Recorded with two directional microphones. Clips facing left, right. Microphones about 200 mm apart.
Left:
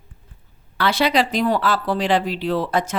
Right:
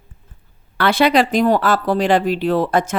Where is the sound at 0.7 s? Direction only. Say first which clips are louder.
Right 4 dB; 55° right (ahead or behind).